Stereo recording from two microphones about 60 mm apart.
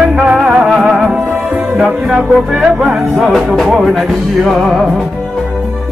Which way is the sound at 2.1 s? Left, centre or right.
Centre.